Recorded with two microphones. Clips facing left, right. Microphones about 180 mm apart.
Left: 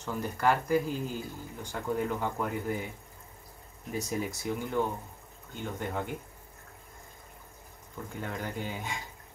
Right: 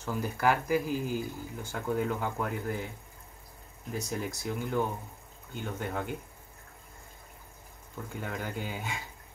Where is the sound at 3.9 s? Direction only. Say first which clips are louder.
Left 2 dB; 5° left (ahead or behind).